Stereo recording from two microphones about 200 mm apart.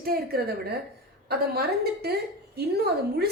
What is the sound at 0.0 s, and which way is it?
A woman's voice, 50° right (ahead or behind).